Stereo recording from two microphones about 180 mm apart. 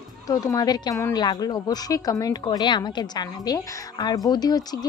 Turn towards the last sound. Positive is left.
turn(degrees=20)  # may be behind; listen again after turning